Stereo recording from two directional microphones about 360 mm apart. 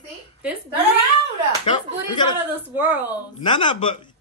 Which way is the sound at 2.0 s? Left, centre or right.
Centre.